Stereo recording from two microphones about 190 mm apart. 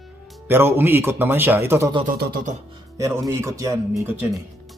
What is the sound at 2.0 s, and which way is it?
Speech, 50° right (ahead or behind).